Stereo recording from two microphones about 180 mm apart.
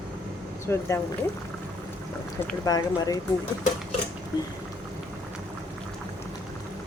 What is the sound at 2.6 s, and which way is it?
Speech, 20° left (ahead or behind).